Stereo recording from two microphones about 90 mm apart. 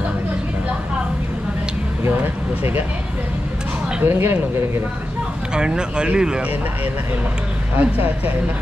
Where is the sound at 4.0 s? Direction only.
25° right (ahead or behind).